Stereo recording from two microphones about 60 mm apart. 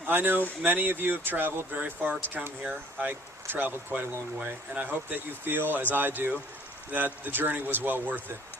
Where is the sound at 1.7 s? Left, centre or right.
Right.